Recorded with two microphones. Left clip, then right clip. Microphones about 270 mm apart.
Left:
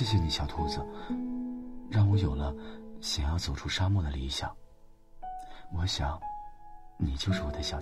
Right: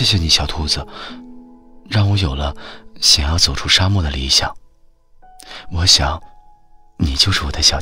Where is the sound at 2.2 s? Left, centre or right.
Right.